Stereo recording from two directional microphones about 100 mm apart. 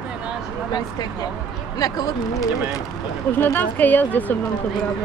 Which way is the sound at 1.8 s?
35° left (ahead or behind).